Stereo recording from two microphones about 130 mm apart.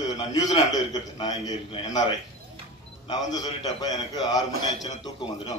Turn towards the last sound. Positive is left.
turn(degrees=35)  # may be behind; listen again after turning